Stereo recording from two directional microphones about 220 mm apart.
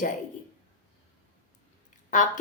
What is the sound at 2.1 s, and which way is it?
Speech, 35° left (ahead or behind).